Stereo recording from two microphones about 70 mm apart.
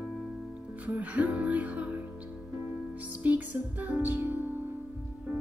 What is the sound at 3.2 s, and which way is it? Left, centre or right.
Music, right.